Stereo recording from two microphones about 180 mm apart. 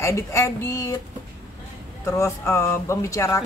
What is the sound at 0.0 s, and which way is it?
Speech, 15° left (ahead or behind).